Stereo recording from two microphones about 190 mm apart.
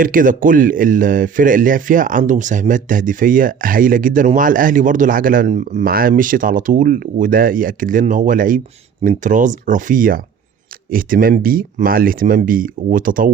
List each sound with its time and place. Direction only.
0.0 s speech: 45° right (ahead or behind)